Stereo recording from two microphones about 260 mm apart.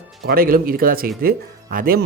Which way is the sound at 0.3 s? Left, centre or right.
Right.